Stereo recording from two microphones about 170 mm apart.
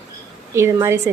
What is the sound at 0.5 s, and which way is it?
Speech, 15° right (ahead or behind).